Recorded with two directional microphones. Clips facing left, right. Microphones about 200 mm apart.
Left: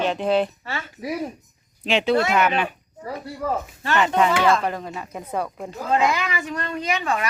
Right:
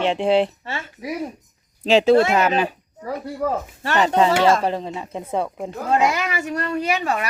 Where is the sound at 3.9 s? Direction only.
40° right (ahead or behind).